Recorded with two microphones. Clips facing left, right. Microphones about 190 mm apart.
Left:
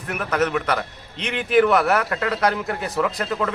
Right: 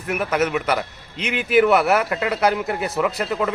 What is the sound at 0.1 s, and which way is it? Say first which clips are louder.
A man's voice: right 1 dB; 5° right (ahead or behind).